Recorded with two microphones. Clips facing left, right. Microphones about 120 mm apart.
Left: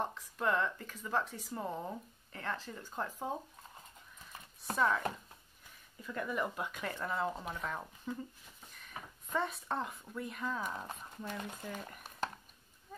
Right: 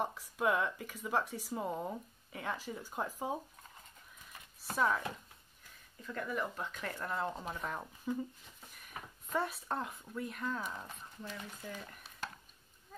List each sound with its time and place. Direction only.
0.0 s speech: 10° right (ahead or behind)
4.7 s speech: 5° right (ahead or behind)
6.0 s speech: 10° left (ahead or behind)
6.9 s speech: centre (ahead or behind)
10.9 s speech: 50° left (ahead or behind)